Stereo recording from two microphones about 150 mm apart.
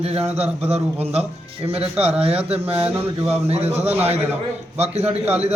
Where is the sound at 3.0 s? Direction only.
45° right (ahead or behind).